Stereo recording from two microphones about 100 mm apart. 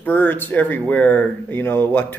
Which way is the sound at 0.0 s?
20° left (ahead or behind).